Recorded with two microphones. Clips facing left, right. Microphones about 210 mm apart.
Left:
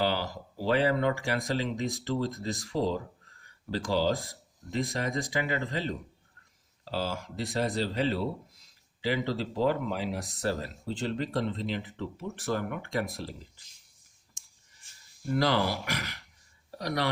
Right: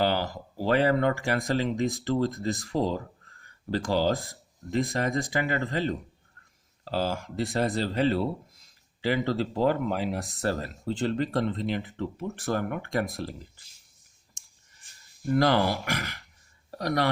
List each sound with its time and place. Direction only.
0.0 s speech: 50° right (ahead or behind)
15.4 s speech: 50° right (ahead or behind)